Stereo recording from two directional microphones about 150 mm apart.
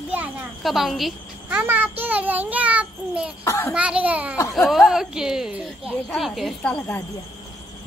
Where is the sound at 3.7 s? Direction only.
10° right (ahead or behind); by 7.0 s 10° left (ahead or behind).